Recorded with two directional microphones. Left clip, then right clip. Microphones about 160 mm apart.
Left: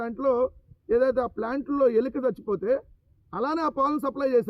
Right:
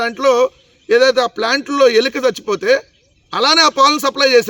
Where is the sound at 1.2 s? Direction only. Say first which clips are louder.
Right 13 dB; 25° right (ahead or behind).